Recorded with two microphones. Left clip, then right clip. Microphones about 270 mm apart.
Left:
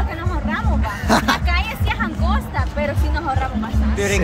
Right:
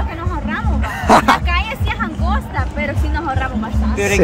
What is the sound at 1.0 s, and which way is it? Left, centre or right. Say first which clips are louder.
Music: right 7 dB; centre.